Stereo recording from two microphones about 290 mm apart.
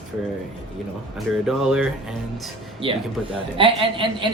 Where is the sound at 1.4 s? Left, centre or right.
Centre.